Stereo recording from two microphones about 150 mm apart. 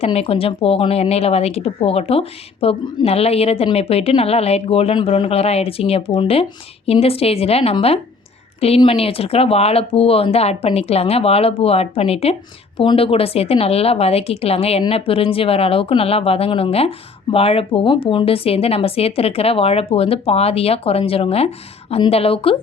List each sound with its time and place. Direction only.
0.0 s a woman's voice: 40° left (ahead or behind)